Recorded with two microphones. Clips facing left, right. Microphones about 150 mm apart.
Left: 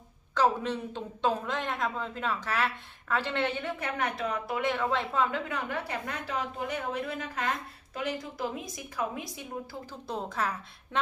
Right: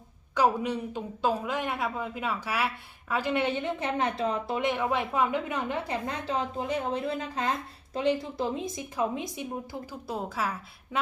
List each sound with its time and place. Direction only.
0.3 s a woman's voice: 10° right (ahead or behind)
10.1 s a woman's voice: 5° right (ahead or behind)